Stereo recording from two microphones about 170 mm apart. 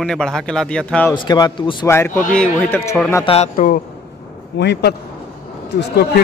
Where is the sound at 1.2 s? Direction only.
25° left (ahead or behind).